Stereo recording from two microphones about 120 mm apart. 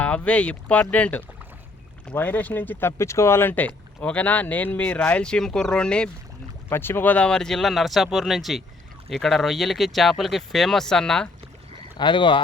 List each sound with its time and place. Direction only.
0.0 s speech: 10° left (ahead or behind)
6.7 s speech: 20° left (ahead or behind)
11.9 s speech: 40° left (ahead or behind)